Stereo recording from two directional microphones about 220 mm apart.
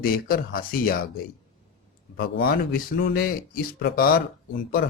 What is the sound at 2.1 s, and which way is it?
Speech, 45° left (ahead or behind).